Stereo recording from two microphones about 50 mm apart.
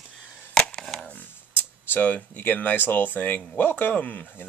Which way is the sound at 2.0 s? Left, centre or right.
Left.